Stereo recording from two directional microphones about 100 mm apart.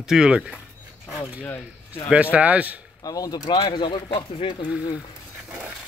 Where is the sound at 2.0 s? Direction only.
15° right (ahead or behind).